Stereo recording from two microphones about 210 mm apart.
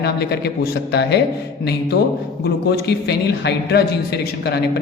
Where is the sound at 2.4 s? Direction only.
50° left (ahead or behind).